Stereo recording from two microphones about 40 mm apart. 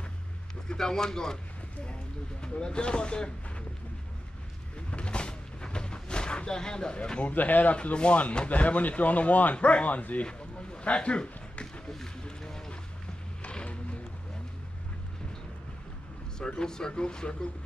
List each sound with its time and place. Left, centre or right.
0.7 s speech: centre
2.4 s speech: left
4.9 s vehicle: left
7.3 s speech: left
7.7 s speech: left
10.2 s a sound: left
11.9 s a sound: centre
13.4 s music: left
16.3 s speech: centre